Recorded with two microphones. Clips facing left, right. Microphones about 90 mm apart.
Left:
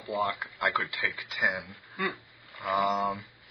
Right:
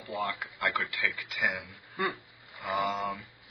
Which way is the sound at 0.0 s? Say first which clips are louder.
Left 4 dB; 35° left (ahead or behind).